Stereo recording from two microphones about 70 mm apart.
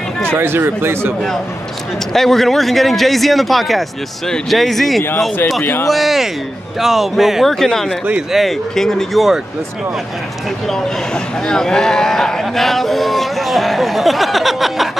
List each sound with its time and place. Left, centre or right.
0.4 s speech: right
2.1 s speech: centre
5.6 s speech: left
5.9 s speech: centre
11.4 s speech: centre